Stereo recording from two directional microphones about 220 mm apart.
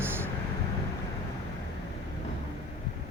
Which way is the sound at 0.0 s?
10° right (ahead or behind).